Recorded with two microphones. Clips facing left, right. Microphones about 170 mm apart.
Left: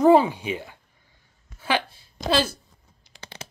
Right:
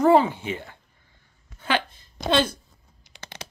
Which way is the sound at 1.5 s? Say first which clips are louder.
Even; 10° left (ahead or behind).